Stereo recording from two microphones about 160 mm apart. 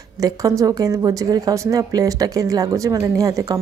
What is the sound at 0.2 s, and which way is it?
A woman's voice, 20° right (ahead or behind).